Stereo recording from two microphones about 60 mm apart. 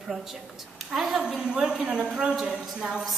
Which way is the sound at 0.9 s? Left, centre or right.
Centre.